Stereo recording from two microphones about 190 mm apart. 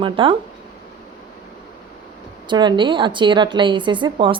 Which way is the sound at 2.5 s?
25° right (ahead or behind).